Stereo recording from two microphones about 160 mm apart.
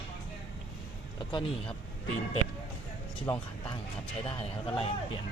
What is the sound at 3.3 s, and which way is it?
Speech, 25° left (ahead or behind).